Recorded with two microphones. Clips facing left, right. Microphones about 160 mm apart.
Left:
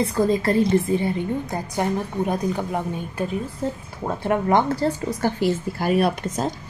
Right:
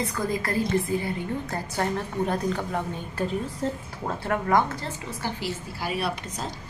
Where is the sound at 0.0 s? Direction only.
25° left (ahead or behind).